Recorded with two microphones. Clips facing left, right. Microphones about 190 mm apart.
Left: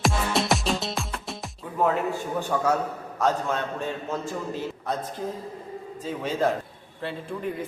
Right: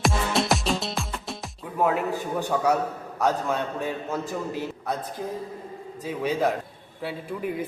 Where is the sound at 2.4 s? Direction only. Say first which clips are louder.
Right 1 dB; 15° right (ahead or behind).